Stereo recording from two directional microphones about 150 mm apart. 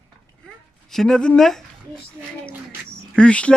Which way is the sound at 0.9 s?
5° left (ahead or behind).